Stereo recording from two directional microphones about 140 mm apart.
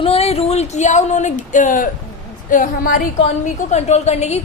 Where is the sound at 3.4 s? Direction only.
55° left (ahead or behind).